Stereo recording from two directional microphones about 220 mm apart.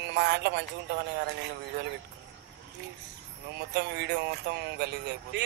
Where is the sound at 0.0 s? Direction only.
50° right (ahead or behind).